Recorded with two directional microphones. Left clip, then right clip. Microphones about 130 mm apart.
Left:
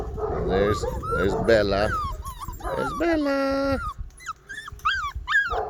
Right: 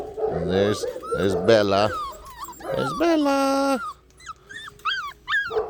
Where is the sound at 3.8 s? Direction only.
10° left (ahead or behind).